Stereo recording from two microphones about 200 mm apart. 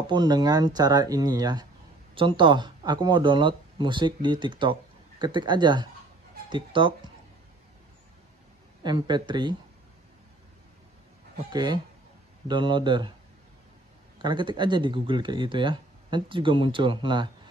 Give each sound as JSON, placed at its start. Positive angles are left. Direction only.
{"t": 0.0, "sound": "speech", "side_deg": -20}
{"t": 8.8, "sound": "speech", "side_deg": -20}
{"t": 11.5, "sound": "speech", "side_deg": -20}
{"t": 14.1, "sound": "speech", "side_deg": -25}